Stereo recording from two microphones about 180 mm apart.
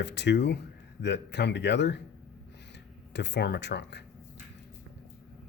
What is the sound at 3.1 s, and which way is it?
Speech, 75° left (ahead or behind).